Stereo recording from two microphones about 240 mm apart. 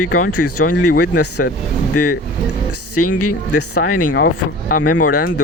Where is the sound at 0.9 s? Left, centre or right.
Left.